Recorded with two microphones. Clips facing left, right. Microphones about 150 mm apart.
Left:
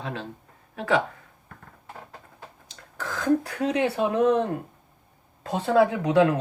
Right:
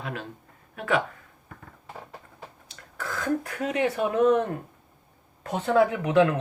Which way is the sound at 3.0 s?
35° left (ahead or behind).